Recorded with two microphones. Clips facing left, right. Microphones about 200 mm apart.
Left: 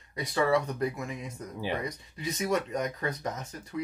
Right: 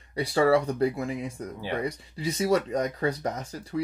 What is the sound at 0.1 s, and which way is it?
Speech, 30° right (ahead or behind).